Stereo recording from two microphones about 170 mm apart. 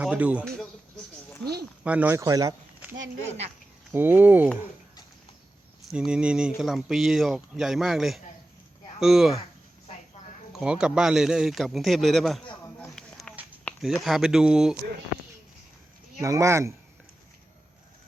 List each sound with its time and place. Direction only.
0.0 s speech: 10° right (ahead or behind)
1.8 s speech: 10° right (ahead or behind)
3.9 s speech: 10° right (ahead or behind)
5.9 s a man's voice: 5° right (ahead or behind)
10.5 s a man's voice: 5° right (ahead or behind)
13.0 s a sound: 5° left (ahead or behind)
13.7 s a man's voice: centre (ahead or behind)
16.2 s speech: 20° right (ahead or behind)